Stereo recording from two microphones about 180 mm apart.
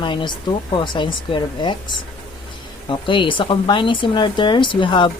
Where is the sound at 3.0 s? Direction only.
25° left (ahead or behind).